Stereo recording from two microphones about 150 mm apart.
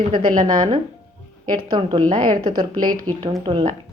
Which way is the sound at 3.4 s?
35° right (ahead or behind).